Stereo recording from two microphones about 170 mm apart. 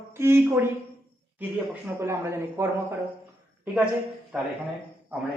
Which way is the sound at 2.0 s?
15° right (ahead or behind).